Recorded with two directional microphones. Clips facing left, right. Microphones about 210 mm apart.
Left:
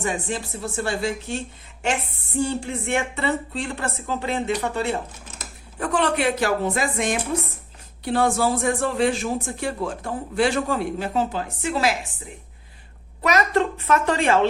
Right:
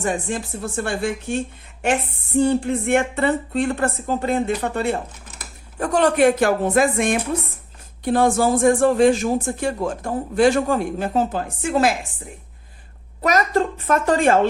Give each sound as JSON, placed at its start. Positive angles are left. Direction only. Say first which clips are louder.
{"t": 0.6, "sound": "speech", "louder": "right 1 dB", "side_deg": -50}
{"t": 2.4, "sound": "speech", "louder": "right 6 dB", "side_deg": -55}
{"t": 13.2, "sound": "speech", "louder": "right 1 dB", "side_deg": -40}